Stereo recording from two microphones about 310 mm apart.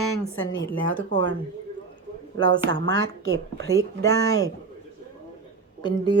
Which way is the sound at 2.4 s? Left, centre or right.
Centre.